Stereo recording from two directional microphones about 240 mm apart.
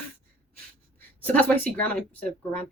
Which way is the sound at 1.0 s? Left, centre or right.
Centre.